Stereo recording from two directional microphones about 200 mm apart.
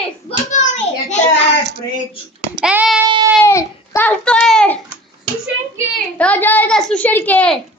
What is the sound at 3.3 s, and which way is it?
Child singing, 15° left (ahead or behind).